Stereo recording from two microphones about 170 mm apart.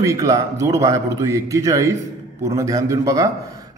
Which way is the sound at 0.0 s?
20° right (ahead or behind).